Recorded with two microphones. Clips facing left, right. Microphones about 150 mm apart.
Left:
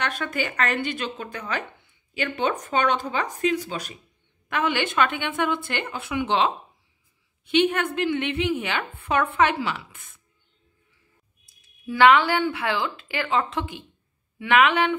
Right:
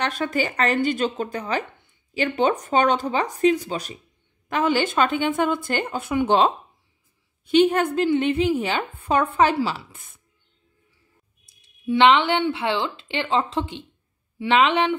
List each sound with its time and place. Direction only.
0.0 s a woman's voice: 35° right (ahead or behind)
11.8 s speech: 25° right (ahead or behind)